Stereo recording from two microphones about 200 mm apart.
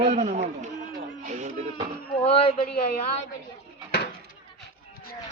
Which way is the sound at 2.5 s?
45° left (ahead or behind).